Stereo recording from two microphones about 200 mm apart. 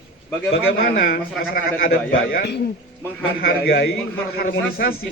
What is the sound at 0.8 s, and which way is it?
A man's voice, 45° left (ahead or behind).